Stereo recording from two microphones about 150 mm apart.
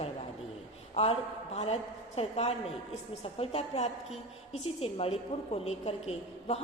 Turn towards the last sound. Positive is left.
turn(degrees=45)  # may be behind; listen again after turning